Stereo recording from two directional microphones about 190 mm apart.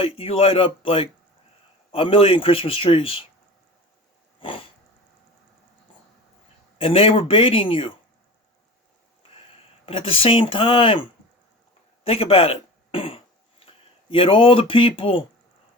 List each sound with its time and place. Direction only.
0.0 s a man's voice: 30° left (ahead or behind)
4.4 s a sound: 25° left (ahead or behind)
6.7 s a man's voice: 30° left (ahead or behind)
9.3 s speech: 30° left (ahead or behind)
12.0 s throat clearing: 30° left (ahead or behind)